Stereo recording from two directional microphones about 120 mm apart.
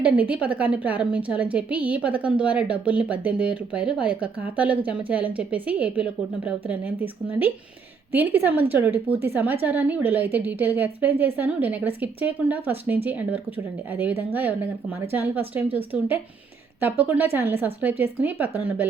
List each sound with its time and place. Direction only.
0.0 s a woman's voice: 10° right (ahead or behind)